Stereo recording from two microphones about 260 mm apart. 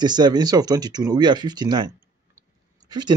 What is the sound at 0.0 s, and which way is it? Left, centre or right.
Speech, centre.